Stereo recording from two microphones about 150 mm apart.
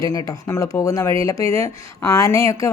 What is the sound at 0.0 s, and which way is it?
Speech, 20° left (ahead or behind).